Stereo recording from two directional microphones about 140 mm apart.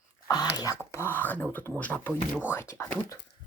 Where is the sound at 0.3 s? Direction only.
25° left (ahead or behind).